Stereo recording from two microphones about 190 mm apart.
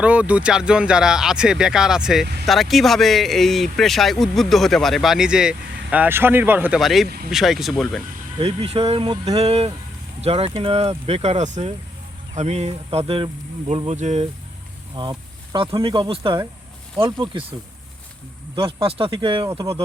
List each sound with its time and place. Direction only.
0.0 s speech: 5° right (ahead or behind)
8.4 s insect: 30° right (ahead or behind)
14.9 s speech: 25° right (ahead or behind)
18.5 s speech: 30° right (ahead or behind)